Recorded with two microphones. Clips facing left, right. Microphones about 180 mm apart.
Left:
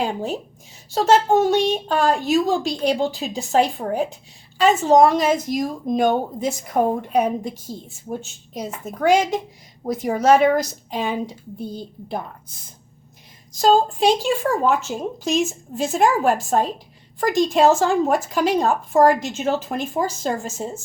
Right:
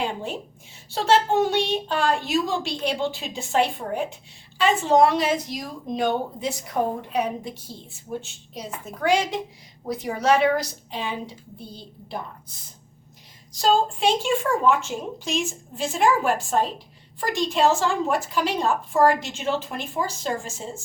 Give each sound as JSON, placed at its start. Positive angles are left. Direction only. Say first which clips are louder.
{"t": 0.0, "sound": "a woman's voice", "louder": "left 4 dB", "side_deg": 40}